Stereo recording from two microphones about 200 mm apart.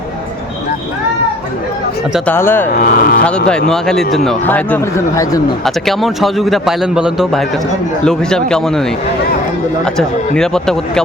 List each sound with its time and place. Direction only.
2.1 s speech: 10° left (ahead or behind)
2.7 s speech: 45° left (ahead or behind)
3.2 s a man's voice: 5° left (ahead or behind)
5.6 s a man's voice: centre (ahead or behind)